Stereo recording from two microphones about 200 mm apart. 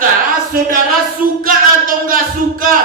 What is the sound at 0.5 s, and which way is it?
Speech, 45° right (ahead or behind).